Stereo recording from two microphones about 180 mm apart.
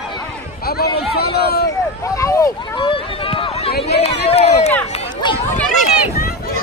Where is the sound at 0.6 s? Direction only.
60° left (ahead or behind).